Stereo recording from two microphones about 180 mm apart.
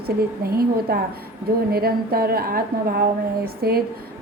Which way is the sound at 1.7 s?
55° right (ahead or behind).